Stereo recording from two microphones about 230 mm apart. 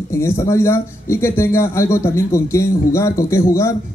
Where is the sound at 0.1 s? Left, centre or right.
Centre.